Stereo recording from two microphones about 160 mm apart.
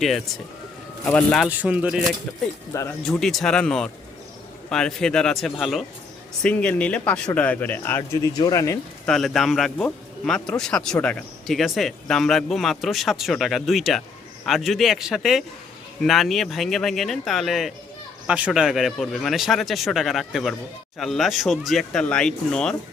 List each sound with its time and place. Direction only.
1.0 s speech: 5° left (ahead or behind)
1.5 s speech: 10° right (ahead or behind); by 8.8 s 20° left (ahead or behind)
9.0 s speech: centre (ahead or behind)